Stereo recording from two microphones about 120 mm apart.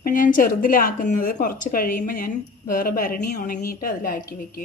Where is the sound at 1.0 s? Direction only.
90° left.